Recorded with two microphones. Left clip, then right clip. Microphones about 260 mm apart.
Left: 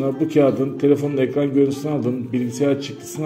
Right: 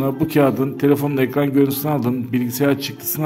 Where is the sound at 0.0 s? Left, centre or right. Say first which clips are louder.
Even; right.